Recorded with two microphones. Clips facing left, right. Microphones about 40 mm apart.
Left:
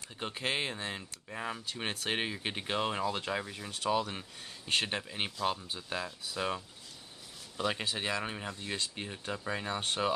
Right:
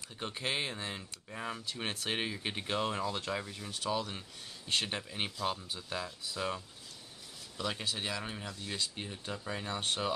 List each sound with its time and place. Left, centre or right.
0.2 s speech: centre
7.6 s speech: left